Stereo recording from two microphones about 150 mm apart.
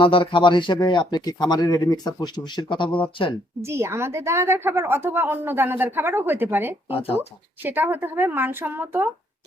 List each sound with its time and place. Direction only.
0.0 s speech: 35° left (ahead or behind)
3.6 s a woman's voice: 15° right (ahead or behind)